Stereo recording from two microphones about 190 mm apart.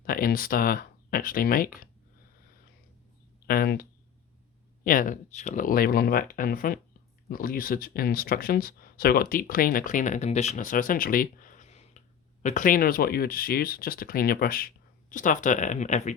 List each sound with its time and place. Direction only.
0.0 s speech: 50° left (ahead or behind)
3.4 s speech: 55° left (ahead or behind)